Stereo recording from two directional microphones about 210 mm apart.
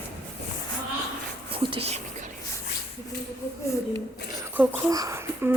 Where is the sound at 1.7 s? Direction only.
30° right (ahead or behind).